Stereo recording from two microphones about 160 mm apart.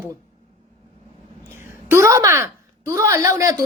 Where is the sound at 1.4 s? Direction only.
15° right (ahead or behind).